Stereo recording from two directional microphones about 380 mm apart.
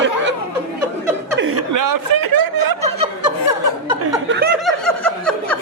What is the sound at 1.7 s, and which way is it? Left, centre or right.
Speech, right.